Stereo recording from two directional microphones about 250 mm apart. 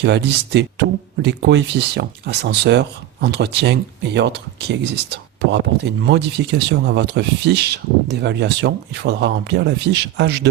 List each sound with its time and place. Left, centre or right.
0.0 s speech: right